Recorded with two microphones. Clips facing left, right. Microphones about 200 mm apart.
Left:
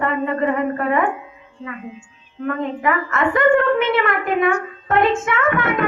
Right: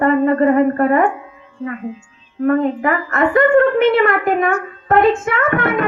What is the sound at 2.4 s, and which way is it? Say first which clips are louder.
A woman's voice: right 6 dB; 40° right (ahead or behind).